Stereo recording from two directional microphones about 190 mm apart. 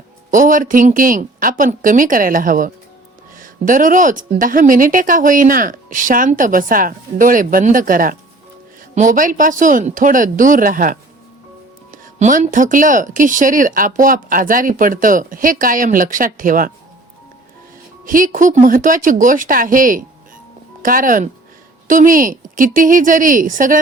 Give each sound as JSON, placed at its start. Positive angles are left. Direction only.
{"t": 0.3, "sound": "a woman's voice", "side_deg": -45}
{"t": 18.0, "sound": "a woman's voice", "side_deg": -45}